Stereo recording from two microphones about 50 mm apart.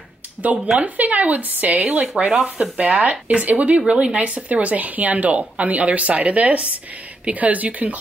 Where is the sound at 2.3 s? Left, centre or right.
Centre.